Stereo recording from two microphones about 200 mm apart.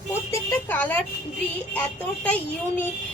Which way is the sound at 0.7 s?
10° left (ahead or behind).